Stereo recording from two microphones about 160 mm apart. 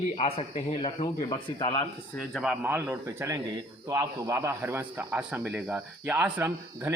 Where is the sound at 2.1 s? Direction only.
Centre (ahead or behind).